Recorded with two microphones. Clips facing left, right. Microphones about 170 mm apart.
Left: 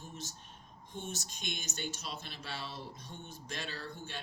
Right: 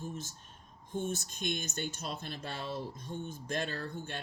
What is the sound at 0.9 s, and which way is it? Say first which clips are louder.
Speech: right 7 dB; 55° right (ahead or behind).